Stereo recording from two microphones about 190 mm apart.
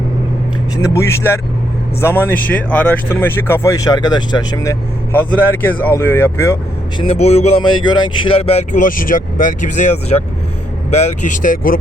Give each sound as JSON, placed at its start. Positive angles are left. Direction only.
{"t": 0.8, "sound": "speech", "side_deg": 15}
{"t": 7.0, "sound": "speech", "side_deg": 35}
{"t": 7.9, "sound": "speech", "side_deg": 25}